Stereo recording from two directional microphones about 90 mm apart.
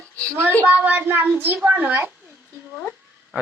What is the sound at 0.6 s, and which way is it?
A child's voice, 20° right (ahead or behind).